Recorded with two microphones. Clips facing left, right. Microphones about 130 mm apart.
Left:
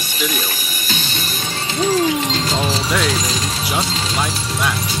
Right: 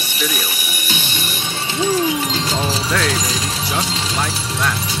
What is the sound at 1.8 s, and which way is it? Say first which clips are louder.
Speech: left 1 dB; 25° left (ahead or behind).